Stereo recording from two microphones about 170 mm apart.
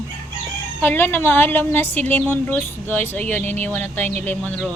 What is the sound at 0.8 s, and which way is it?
A woman's voice, 10° left (ahead or behind).